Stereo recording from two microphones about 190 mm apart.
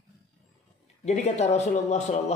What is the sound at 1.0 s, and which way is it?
A man's voice, 35° left (ahead or behind).